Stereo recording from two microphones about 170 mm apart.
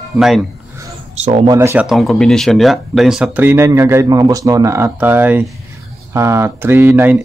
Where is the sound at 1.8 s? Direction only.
Centre (ahead or behind).